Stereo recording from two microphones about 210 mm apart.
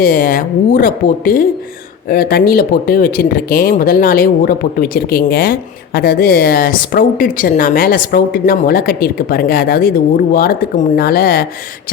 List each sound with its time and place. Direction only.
0.0 s speech: 40° left (ahead or behind)